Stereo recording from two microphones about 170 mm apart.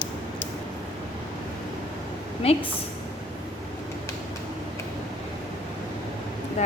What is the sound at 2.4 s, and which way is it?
Speech, 35° left (ahead or behind).